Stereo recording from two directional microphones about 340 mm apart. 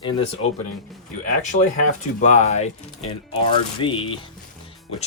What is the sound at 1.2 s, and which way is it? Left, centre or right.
Speech, left.